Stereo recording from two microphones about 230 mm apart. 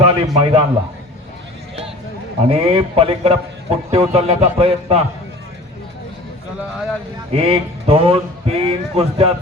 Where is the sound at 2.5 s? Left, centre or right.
Right.